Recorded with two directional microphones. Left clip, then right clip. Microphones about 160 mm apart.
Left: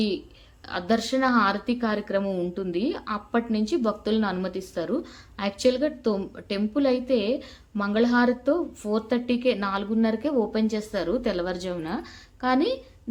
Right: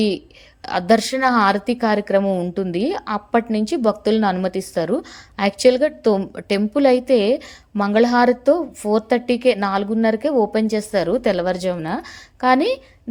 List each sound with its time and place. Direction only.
0.6 s a woman's voice: 45° right (ahead or behind)